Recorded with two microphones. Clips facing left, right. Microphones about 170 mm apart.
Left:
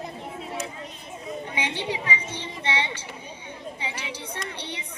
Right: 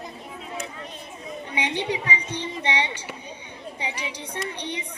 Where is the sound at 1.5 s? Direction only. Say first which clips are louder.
Right 4 dB; 15° right (ahead or behind).